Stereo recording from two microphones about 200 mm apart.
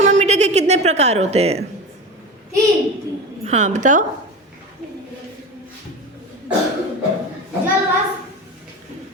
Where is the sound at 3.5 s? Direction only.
35° right (ahead or behind).